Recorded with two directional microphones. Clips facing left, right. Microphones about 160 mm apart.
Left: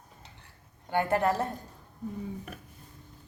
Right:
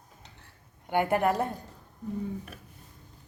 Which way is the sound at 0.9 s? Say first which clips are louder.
Right 1 dB; 15° right (ahead or behind).